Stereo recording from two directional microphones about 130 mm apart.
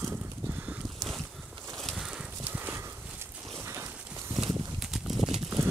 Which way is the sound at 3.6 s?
20° right (ahead or behind).